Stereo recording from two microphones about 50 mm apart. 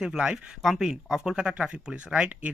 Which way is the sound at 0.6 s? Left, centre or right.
Centre.